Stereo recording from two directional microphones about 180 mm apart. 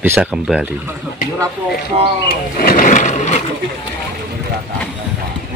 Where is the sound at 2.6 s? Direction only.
50° left (ahead or behind).